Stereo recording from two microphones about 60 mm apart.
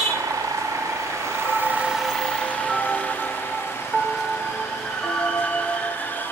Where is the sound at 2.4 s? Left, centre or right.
Left.